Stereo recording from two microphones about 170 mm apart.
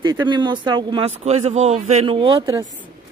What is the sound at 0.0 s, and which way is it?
Speech, 25° right (ahead or behind).